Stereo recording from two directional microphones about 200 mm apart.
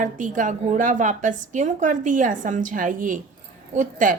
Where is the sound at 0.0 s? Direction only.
40° right (ahead or behind).